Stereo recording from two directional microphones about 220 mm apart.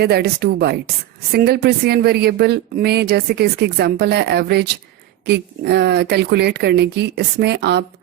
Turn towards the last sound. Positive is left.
turn(degrees=-50)  # may be behind; listen again after turning